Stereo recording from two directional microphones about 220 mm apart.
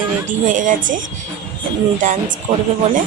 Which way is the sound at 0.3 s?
35° right (ahead or behind).